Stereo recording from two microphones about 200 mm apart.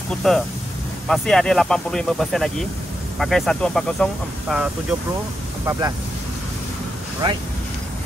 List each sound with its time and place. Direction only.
0.2 s speech: centre (ahead or behind)
5.7 s speech: 15° right (ahead or behind)